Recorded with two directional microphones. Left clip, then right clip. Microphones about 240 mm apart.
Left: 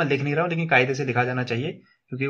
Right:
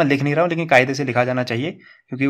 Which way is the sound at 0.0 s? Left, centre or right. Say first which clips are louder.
Right 6 dB; right.